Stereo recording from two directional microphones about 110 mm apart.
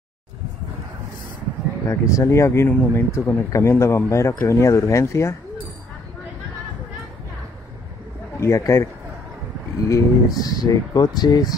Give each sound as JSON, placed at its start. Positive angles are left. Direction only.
{"t": 1.9, "sound": "speech", "side_deg": 25}
{"t": 8.4, "sound": "speech", "side_deg": 25}
{"t": 9.8, "sound": "speech", "side_deg": 30}